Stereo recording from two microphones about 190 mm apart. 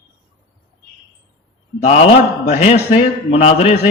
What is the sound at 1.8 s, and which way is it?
A man's voice, 35° left (ahead or behind).